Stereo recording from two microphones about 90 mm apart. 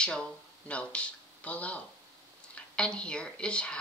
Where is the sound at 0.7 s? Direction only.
15° left (ahead or behind).